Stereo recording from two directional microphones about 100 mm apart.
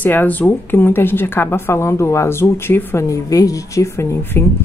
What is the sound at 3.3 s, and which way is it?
Speech, 35° left (ahead or behind).